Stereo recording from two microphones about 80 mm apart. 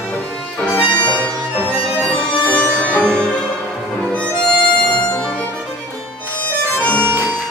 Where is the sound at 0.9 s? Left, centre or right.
Centre.